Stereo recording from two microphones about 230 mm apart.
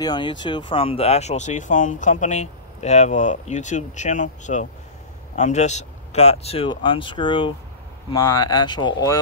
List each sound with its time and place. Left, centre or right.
0.0 s speech: centre